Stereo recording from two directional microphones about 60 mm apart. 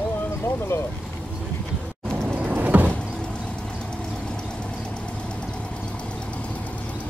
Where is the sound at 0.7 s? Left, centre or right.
Left.